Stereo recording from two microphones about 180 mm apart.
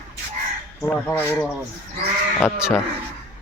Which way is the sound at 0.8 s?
10° left (ahead or behind).